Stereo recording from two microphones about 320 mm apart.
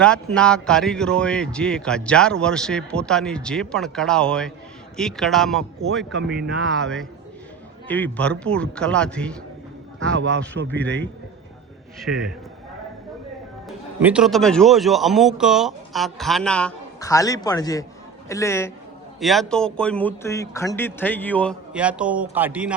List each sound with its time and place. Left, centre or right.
0.0 s a man's voice: centre
10.2 s a man's voice: right
11.9 s a man's voice: centre
13.7 s a man's voice: centre